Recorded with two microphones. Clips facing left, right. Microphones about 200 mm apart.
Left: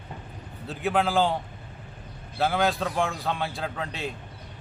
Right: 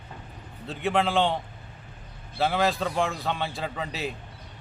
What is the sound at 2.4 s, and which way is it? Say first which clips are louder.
A man's voice: even; centre (ahead or behind).